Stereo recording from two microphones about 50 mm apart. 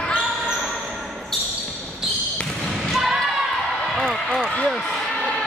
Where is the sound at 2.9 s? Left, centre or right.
Centre.